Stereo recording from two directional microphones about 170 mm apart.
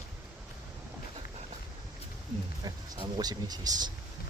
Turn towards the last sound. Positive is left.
turn(degrees=-25)  # may be behind; listen again after turning